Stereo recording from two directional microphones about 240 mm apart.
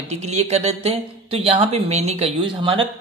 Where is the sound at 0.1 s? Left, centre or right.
Right.